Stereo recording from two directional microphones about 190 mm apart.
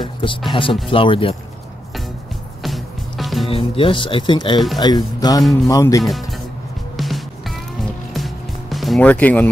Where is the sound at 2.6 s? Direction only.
Centre (ahead or behind).